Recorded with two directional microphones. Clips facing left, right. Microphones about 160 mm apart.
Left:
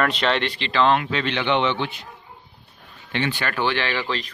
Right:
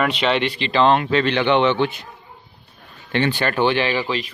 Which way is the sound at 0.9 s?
40° right (ahead or behind).